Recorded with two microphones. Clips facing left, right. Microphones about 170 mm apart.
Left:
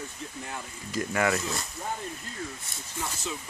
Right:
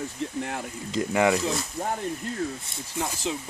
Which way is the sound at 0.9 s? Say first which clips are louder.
Right 5 dB; 20° right (ahead or behind).